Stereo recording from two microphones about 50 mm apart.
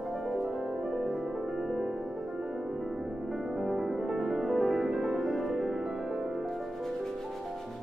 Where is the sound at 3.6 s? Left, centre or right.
Centre.